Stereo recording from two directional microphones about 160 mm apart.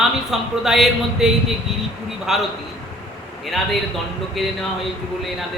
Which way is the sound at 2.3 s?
Centre (ahead or behind).